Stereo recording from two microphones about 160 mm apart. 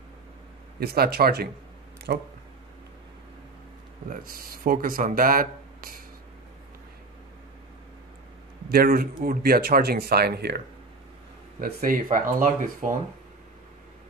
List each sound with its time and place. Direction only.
0.7 s speech: 75° right (ahead or behind)
4.1 s speech: 65° right (ahead or behind)
8.6 s speech: 70° right (ahead or behind); by 10.6 s 90° right
11.6 s speech: 60° right (ahead or behind)